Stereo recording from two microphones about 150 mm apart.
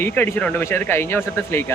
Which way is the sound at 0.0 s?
15° left (ahead or behind).